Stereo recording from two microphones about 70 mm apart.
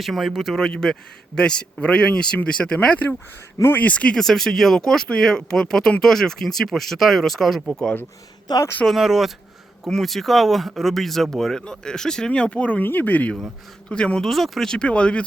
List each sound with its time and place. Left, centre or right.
0.0 s speech: centre
4.2 s speech: centre
8.5 s speech: left
8.9 s speech: centre; by 13.3 s left
13.9 s speech: centre
14.3 s speech: centre